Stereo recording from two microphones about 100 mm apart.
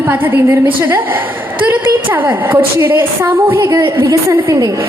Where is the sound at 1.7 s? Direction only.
20° right (ahead or behind).